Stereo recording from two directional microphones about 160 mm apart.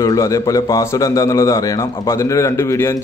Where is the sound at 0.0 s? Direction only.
20° left (ahead or behind).